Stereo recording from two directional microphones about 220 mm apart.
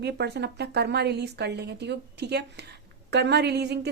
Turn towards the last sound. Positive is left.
turn(degrees=-50)  # may be behind; listen again after turning